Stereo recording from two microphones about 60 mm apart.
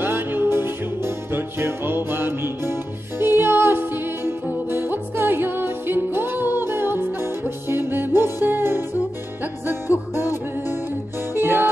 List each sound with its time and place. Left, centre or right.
0.0 s music: right